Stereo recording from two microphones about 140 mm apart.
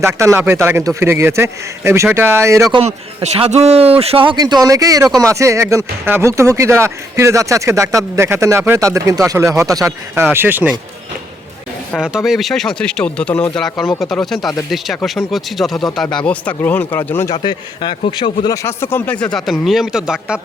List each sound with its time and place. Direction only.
0.0 s speech: 20° right (ahead or behind)
2.7 s speech: 45° right (ahead or behind); by 10.8 s 10° right (ahead or behind)
11.9 s speech: 5° right (ahead or behind); by 17.3 s 20° left (ahead or behind)
17.3 s speech: 35° left (ahead or behind)
18.4 s speech: 20° left (ahead or behind); by 20.4 s 5° right (ahead or behind)